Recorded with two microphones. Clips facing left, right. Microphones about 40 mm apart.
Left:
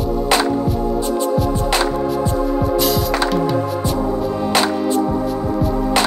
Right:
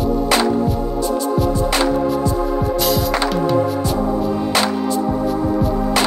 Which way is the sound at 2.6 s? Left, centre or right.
Centre.